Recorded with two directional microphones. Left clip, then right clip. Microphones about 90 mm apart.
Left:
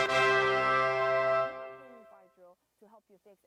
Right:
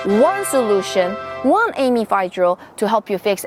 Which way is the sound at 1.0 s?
Centre (ahead or behind).